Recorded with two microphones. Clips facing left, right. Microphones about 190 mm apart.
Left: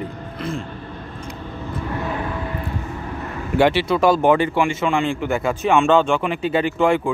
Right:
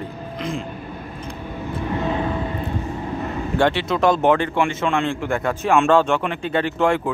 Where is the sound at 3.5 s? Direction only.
5° left (ahead or behind).